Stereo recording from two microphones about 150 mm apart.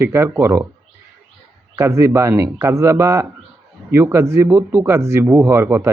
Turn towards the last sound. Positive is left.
turn(degrees=-15)  # may be behind; listen again after turning